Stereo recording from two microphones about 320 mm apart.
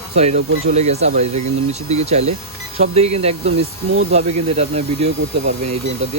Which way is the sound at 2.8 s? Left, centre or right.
Centre.